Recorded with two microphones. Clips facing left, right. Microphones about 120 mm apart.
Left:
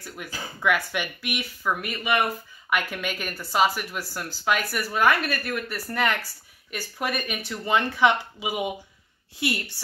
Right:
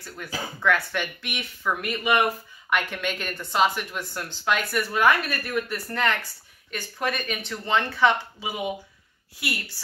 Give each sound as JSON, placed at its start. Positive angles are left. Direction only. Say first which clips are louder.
{"t": 0.2, "sound": "speech", "louder": "right 1 dB", "side_deg": 10}